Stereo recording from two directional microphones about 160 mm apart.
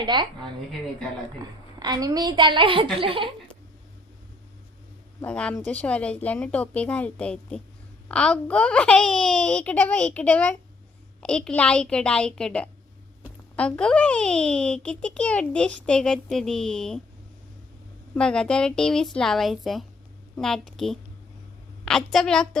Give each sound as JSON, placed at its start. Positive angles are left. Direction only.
{"t": 0.0, "sound": "a woman's voice", "side_deg": -30}
{"t": 1.8, "sound": "a woman's voice", "side_deg": -25}
{"t": 5.2, "sound": "a woman's voice", "side_deg": 5}
{"t": 18.1, "sound": "a child's voice", "side_deg": 5}